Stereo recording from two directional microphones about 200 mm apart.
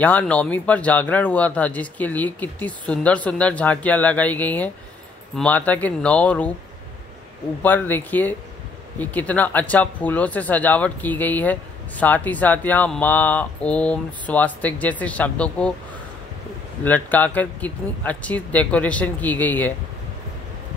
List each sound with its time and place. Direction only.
0.0 s speech: 5° left (ahead or behind)
7.6 s speech: 10° left (ahead or behind)
16.8 s speech: 10° left (ahead or behind)